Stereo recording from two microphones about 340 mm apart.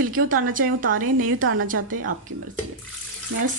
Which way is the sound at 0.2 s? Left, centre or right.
Right.